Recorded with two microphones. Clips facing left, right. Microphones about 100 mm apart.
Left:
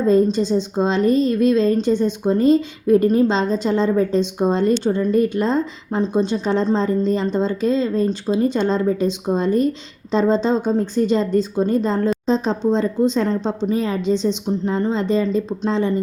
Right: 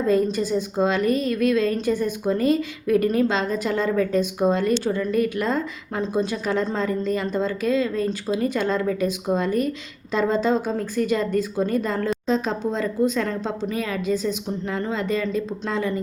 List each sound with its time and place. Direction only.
0.1 s a woman's voice: 25° left (ahead or behind)